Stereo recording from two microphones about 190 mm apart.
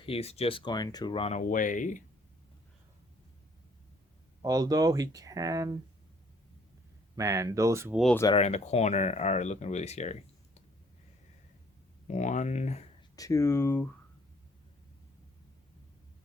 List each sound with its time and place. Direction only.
0.0 s speech: 30° left (ahead or behind)
4.4 s speech: 20° right (ahead or behind)
7.2 s speech: 15° right (ahead or behind)
8.3 s speech: 35° left (ahead or behind)
12.0 s speech: 40° left (ahead or behind)
13.1 s speech: 15° left (ahead or behind)